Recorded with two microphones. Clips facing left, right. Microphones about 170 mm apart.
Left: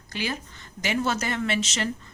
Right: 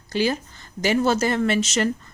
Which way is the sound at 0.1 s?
35° right (ahead or behind).